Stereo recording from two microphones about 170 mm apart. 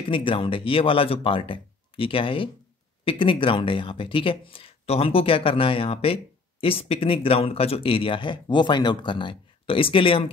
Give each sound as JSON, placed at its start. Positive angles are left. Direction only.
{"t": 0.1, "sound": "speech", "side_deg": 30}